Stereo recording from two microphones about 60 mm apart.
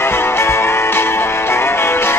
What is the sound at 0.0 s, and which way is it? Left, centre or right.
Music, left.